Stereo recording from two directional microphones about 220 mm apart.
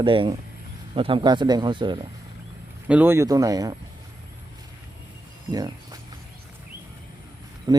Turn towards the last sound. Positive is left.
turn(degrees=-20)  # may be behind; listen again after turning